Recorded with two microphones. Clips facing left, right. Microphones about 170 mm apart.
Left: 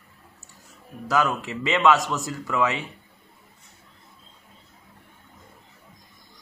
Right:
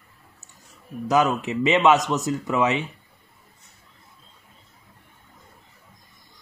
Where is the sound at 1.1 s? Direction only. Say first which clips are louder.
Right 3 dB; 20° right (ahead or behind).